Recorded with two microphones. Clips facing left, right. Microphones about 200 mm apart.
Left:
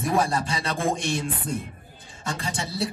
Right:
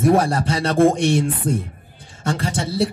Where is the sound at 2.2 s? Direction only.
70° right (ahead or behind).